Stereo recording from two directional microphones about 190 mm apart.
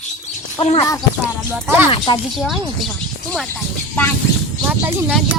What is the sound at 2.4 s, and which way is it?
Speech, centre (ahead or behind).